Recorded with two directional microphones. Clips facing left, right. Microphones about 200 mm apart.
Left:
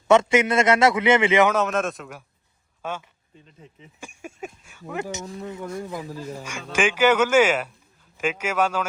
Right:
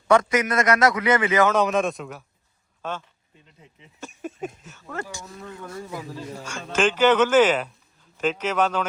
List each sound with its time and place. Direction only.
0.1 s a man's voice: 25° left (ahead or behind)
1.5 s speech: centre (ahead or behind)